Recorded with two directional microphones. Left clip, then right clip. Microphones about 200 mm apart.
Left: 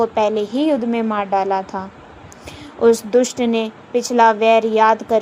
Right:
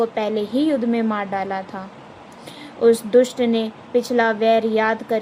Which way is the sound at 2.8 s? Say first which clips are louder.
Left 1 dB; 20° left (ahead or behind).